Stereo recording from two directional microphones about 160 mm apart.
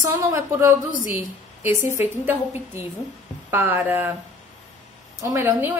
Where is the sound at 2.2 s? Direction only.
15° right (ahead or behind).